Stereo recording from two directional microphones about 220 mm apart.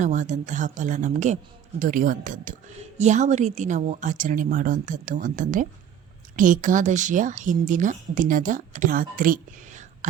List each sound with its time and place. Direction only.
0.0 s a woman's voice: 35° right (ahead or behind)